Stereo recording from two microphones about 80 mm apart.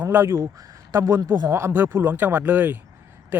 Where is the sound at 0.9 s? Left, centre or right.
Right.